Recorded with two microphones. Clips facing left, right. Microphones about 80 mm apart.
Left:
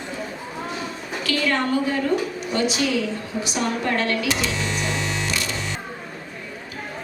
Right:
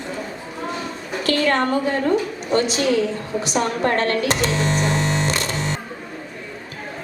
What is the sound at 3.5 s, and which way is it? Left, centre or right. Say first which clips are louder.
Music: right 4 dB; right.